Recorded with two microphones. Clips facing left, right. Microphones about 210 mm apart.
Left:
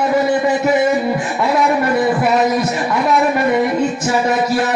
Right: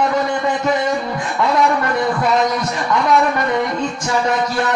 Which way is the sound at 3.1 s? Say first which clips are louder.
Left 3 dB; 5° left (ahead or behind).